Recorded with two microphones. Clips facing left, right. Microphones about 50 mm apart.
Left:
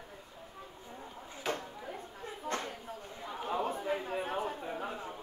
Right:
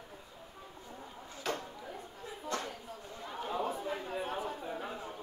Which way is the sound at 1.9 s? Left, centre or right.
Left.